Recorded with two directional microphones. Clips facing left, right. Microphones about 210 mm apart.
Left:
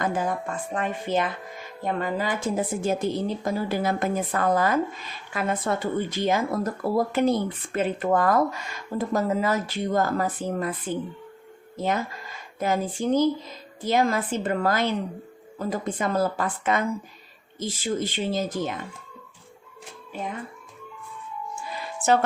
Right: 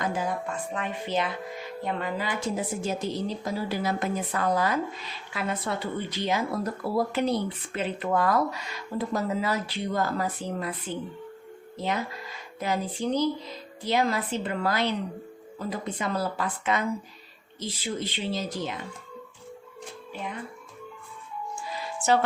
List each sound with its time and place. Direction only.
0.0 s a woman's voice: 50° left (ahead or behind)